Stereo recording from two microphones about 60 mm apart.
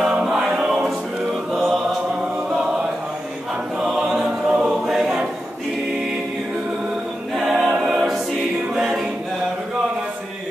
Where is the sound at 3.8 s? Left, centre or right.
Centre.